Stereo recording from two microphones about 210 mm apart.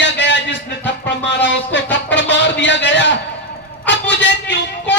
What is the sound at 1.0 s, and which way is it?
A man's voice, 55° left (ahead or behind).